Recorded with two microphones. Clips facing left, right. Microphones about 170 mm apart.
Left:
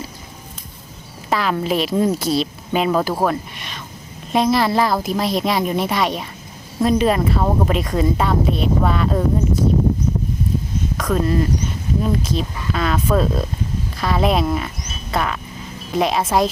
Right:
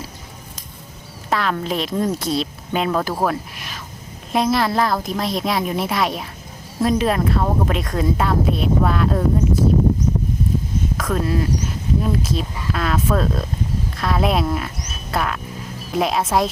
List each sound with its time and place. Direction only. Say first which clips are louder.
1.3 s speech: left 2 dB; centre (ahead or behind)
10.9 s speech: left 3 dB; centre (ahead or behind)
14.8 s music: left 1 dB; centre (ahead or behind)
15.9 s speech: left 1 dB; centre (ahead or behind)